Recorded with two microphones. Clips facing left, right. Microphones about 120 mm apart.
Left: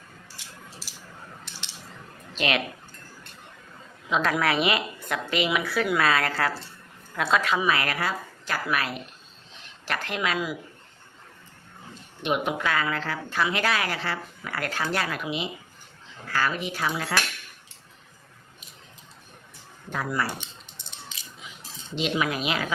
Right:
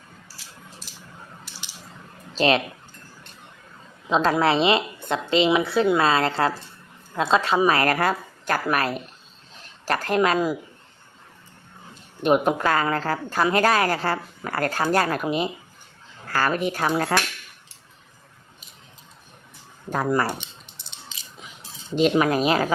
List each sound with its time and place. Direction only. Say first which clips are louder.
0.8 s a sound: right 1 dB; 5° left (ahead or behind)
2.3 s speech: right 7 dB; 30° right (ahead or behind)
4.1 s a woman's voice: right 5 dB; 30° right (ahead or behind)
12.2 s a woman's voice: right 7 dB; 40° right (ahead or behind)
19.9 s a woman's voice: right 6 dB; 45° right (ahead or behind)
21.9 s a woman's voice: right 8 dB; 45° right (ahead or behind)